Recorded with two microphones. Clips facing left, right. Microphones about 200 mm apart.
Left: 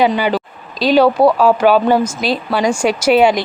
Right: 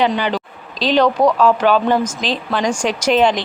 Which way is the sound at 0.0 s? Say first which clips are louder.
Left 3 dB; 10° left (ahead or behind).